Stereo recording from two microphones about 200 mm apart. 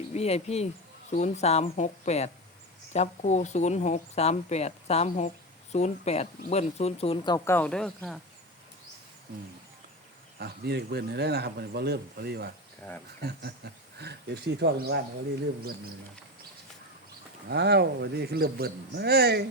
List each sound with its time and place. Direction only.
0.1 s speech: 30° left (ahead or behind); by 8.2 s centre (ahead or behind)
10.3 s speech: 55° right (ahead or behind)
14.0 s speech: 55° right (ahead or behind)
17.5 s speech: 55° right (ahead or behind)